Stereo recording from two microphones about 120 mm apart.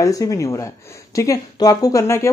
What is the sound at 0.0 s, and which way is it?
A woman's voice, 30° left (ahead or behind).